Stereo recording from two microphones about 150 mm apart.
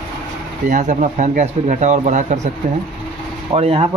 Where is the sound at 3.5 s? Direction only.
40° right (ahead or behind).